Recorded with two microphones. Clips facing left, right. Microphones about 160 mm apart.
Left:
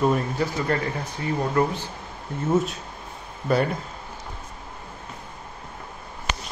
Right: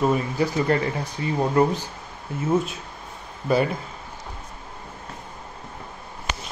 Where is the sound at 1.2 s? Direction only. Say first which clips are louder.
Right 3 dB; 20° right (ahead or behind).